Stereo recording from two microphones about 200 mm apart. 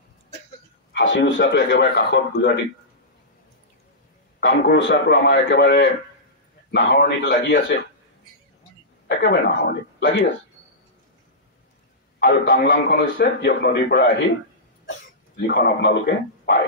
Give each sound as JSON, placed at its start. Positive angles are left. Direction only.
{"t": 0.9, "sound": "speech", "side_deg": 55}
{"t": 4.4, "sound": "speech", "side_deg": 55}
{"t": 9.0, "sound": "speech", "side_deg": 55}
{"t": 12.2, "sound": "a man's voice", "side_deg": 50}
{"t": 14.9, "sound": "a sound", "side_deg": 55}